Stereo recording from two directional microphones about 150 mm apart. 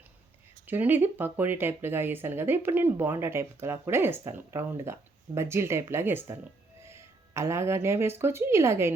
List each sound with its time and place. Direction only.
0.7 s a woman's voice: 10° right (ahead or behind)